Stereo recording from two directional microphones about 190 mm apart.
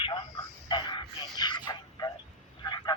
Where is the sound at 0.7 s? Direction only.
25° left (ahead or behind).